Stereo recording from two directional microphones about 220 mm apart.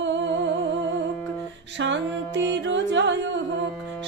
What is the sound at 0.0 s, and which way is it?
Humming, 55° right (ahead or behind).